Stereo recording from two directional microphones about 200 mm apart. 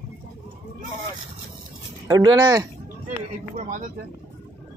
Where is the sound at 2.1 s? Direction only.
20° right (ahead or behind).